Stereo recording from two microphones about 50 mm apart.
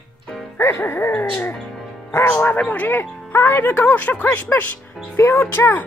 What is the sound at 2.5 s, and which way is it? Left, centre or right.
Speech, left.